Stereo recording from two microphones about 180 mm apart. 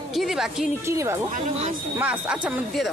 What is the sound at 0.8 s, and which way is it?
Speech, 15° right (ahead or behind).